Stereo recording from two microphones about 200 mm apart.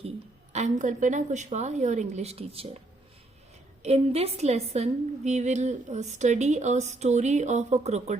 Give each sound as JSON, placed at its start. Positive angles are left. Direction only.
{"t": 0.5, "sound": "a woman's voice", "side_deg": -35}
{"t": 3.8, "sound": "a woman's voice", "side_deg": -30}